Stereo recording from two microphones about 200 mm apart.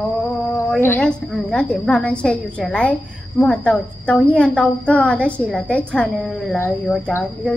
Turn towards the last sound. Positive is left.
turn(degrees=5)  # may be behind; listen again after turning